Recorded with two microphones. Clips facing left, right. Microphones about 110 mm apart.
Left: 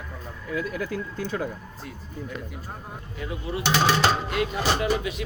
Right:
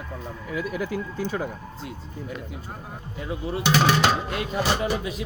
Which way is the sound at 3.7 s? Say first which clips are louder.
Right 1 dB; 10° right (ahead or behind).